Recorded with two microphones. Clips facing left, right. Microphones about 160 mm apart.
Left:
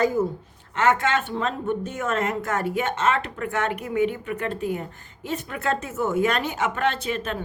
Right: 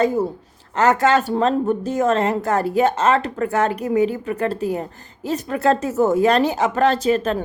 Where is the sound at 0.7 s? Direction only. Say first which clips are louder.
Right 5 dB; 40° right (ahead or behind).